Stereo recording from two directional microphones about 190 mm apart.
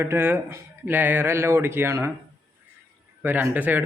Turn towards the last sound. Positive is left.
turn(degrees=-10)  # may be behind; listen again after turning